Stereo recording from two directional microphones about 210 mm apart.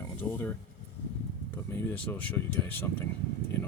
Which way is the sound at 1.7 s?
10° left (ahead or behind).